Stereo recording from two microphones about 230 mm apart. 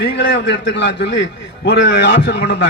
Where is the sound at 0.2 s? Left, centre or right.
Left.